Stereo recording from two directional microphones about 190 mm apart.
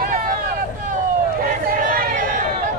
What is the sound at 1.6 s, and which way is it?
Chatter, 45° right (ahead or behind).